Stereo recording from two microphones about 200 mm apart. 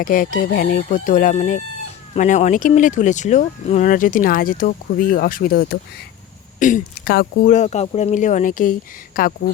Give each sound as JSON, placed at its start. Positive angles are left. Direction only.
{"t": 0.0, "sound": "speech", "side_deg": 45}